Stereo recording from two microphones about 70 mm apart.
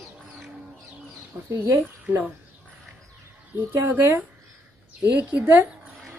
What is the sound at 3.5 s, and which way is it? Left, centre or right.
Speech, right.